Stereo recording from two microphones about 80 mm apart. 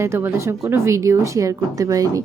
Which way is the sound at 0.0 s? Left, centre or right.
Right.